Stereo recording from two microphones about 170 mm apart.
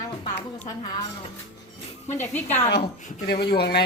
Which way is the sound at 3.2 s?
70° left (ahead or behind).